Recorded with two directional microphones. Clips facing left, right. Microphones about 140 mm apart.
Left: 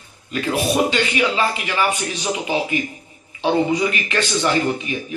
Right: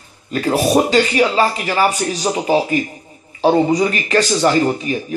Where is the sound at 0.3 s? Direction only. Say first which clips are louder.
Right 5 dB; 40° right (ahead or behind).